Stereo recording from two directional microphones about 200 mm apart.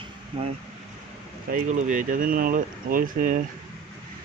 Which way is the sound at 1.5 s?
40° right (ahead or behind).